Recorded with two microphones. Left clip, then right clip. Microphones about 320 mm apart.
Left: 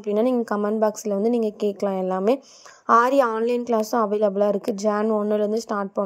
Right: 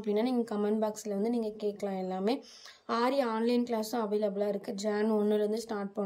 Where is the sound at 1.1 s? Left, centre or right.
Left.